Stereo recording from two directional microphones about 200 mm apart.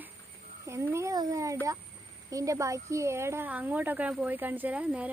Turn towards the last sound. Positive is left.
turn(degrees=-5)  # may be behind; listen again after turning